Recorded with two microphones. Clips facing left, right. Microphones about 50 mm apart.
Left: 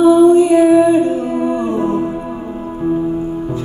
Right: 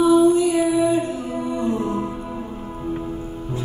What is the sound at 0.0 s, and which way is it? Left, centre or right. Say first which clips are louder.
Music: left 7 dB; left.